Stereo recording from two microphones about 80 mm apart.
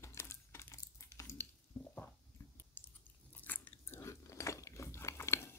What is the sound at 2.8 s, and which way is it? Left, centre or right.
Biting, left.